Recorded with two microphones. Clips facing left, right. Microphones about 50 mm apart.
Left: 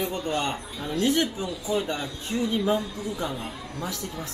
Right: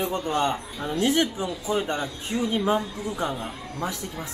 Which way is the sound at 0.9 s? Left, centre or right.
Right.